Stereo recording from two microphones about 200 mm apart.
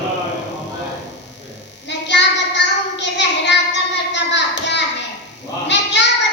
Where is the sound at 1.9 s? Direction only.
60° left (ahead or behind).